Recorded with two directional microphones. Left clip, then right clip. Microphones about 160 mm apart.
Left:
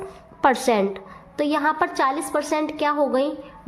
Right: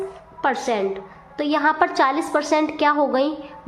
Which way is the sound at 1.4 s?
30° left (ahead or behind).